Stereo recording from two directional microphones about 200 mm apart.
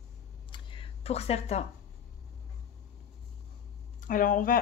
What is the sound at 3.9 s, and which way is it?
Speech, 40° left (ahead or behind).